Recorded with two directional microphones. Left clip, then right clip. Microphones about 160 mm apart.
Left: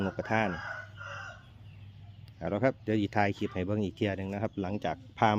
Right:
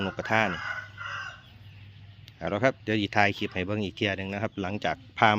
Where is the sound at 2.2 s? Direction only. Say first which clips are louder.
Right 4 dB; 10° left (ahead or behind).